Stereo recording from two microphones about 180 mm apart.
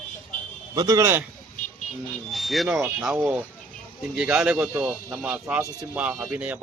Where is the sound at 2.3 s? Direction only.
Centre (ahead or behind).